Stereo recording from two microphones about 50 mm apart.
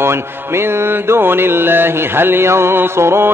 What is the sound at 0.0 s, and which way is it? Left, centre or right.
Music, right.